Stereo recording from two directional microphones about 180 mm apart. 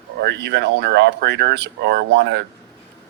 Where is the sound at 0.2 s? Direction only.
70° right (ahead or behind).